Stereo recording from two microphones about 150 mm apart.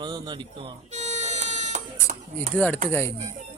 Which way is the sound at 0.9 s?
50° right (ahead or behind).